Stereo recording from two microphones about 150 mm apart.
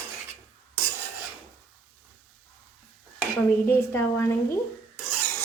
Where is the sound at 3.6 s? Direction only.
15° left (ahead or behind).